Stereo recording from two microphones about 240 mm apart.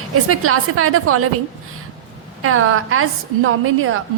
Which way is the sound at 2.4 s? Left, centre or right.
Right.